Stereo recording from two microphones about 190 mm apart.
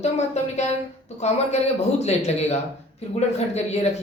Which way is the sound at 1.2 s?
35° left (ahead or behind).